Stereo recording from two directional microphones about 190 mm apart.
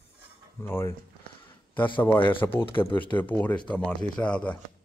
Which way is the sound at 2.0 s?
10° left (ahead or behind).